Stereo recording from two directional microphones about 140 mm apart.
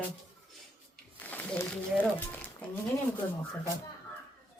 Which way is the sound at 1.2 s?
10° left (ahead or behind).